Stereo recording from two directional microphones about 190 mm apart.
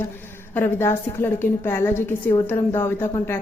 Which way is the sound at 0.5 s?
15° left (ahead or behind).